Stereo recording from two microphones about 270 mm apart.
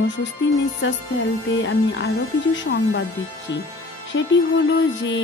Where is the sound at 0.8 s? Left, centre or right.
Left.